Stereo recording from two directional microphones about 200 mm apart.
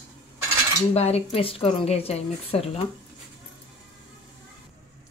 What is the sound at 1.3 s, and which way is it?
Speech, 30° left (ahead or behind).